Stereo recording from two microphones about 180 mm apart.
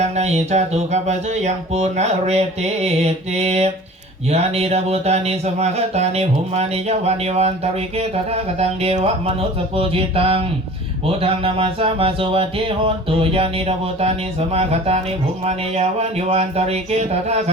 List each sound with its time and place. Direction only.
0.0 s speech: 35° right (ahead or behind)